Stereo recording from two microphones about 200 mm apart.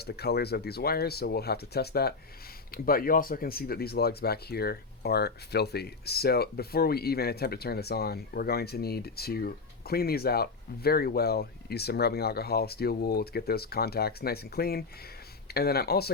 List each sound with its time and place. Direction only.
0.0 s speech: 55° left (ahead or behind)